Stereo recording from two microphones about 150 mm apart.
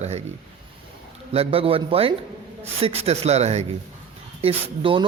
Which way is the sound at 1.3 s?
40° right (ahead or behind).